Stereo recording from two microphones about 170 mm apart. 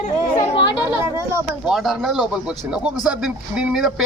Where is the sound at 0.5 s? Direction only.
30° left (ahead or behind).